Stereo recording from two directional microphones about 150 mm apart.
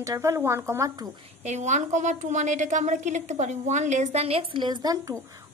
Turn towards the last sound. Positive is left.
turn(degrees=-25)  # may be behind; listen again after turning